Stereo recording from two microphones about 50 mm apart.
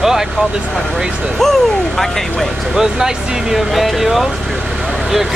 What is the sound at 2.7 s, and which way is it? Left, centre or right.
Speech, centre.